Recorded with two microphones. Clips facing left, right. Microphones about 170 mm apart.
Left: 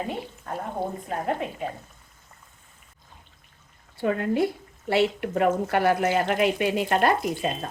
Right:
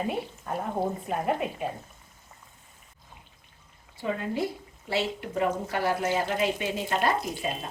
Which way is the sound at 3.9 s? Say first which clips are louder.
Left 6 dB; 60° left (ahead or behind).